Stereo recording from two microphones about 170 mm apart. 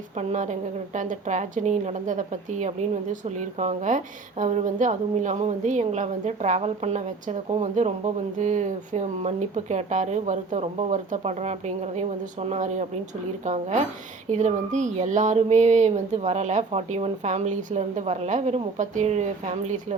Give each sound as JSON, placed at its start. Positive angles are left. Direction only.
{"t": 0.2, "sound": "a woman's voice", "side_deg": -45}